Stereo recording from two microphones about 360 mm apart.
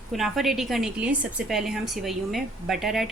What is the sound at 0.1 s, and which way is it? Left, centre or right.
A woman's voice, centre.